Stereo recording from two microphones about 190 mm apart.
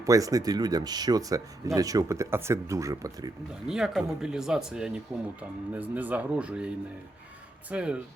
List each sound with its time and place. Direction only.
0.0 s speech: 20° right (ahead or behind)
3.7 s speech: 5° right (ahead or behind)
7.7 s speech: 5° right (ahead or behind)